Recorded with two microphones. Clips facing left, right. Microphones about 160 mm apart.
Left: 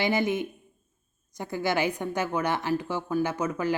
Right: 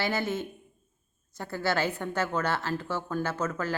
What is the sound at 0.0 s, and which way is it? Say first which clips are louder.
A woman's voice: left 4 dB; 15° left (ahead or behind).